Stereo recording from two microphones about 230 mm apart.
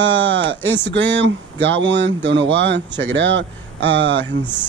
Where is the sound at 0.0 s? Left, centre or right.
Right.